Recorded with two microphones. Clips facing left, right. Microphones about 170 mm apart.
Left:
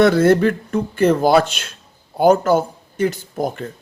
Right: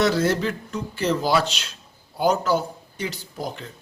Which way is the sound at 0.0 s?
55° left (ahead or behind).